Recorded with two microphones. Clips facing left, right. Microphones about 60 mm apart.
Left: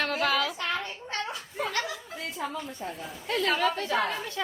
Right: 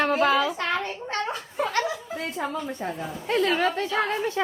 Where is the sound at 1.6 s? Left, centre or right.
Right.